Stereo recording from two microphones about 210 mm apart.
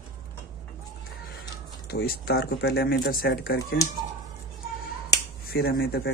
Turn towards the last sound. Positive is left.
turn(degrees=50)  # may be behind; listen again after turning